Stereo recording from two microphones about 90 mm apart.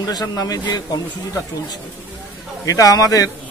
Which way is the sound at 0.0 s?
45° left (ahead or behind).